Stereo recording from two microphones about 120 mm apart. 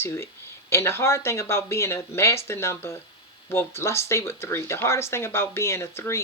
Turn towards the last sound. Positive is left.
turn(degrees=20)  # may be behind; listen again after turning